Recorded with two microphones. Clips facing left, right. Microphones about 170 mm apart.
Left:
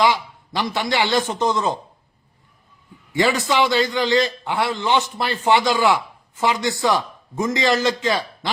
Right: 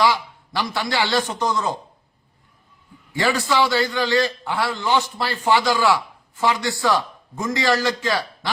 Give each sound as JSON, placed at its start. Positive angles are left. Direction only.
{"t": 0.0, "sound": "a man's voice", "side_deg": 20}
{"t": 3.1, "sound": "a man's voice", "side_deg": 20}